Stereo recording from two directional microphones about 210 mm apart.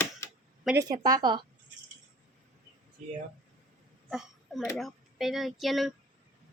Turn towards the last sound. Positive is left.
turn(degrees=0)  # may be behind; listen again after turning